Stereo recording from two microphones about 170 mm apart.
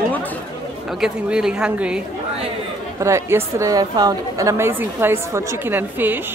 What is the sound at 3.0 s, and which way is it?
A woman's voice, 15° right (ahead or behind).